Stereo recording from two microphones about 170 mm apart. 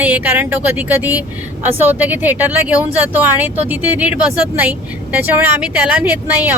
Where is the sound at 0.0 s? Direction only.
10° right (ahead or behind).